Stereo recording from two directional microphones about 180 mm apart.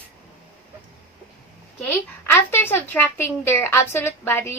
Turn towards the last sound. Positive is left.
turn(degrees=10)  # may be behind; listen again after turning